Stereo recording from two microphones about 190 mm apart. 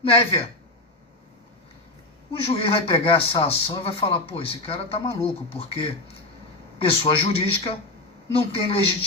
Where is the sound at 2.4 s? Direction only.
30° left (ahead or behind).